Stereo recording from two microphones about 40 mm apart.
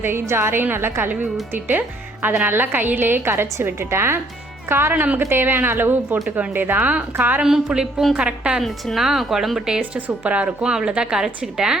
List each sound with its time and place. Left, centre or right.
0.0 s a woman's voice: right
0.6 s a woman's voice: right
3.8 s a woman's voice: right
4.7 s speech: right
6.2 s speech: right
7.7 s a woman's voice: right
9.0 s speech: centre
9.6 s speech: centre
10.2 s speech: right
10.6 s a woman's voice: centre